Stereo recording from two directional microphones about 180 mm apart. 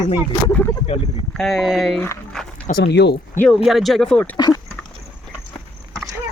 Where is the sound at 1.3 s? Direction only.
Centre (ahead or behind).